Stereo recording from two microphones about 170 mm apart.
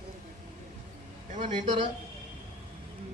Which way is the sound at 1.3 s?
45° right (ahead or behind).